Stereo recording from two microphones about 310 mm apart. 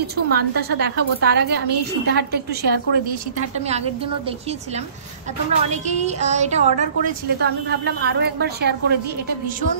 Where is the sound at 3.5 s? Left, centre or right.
Right.